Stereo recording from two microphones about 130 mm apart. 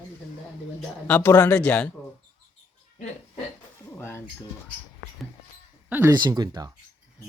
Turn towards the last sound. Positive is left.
turn(degrees=-30)  # may be behind; listen again after turning